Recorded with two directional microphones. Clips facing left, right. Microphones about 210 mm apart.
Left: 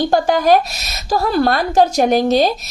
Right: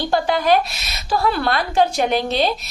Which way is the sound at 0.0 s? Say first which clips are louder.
Left 4 dB; 45° left (ahead or behind).